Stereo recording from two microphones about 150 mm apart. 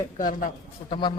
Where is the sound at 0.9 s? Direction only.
30° left (ahead or behind).